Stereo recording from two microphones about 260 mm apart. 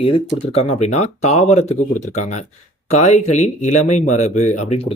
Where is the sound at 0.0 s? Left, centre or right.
Left.